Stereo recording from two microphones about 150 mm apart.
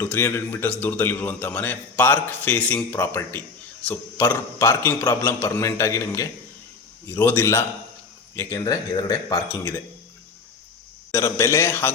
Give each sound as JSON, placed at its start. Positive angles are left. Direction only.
{"t": 0.0, "sound": "a man's voice", "side_deg": 15}
{"t": 11.1, "sound": "a man's voice", "side_deg": 20}